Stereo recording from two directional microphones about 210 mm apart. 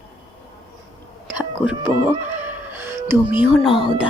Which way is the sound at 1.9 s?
20° left (ahead or behind).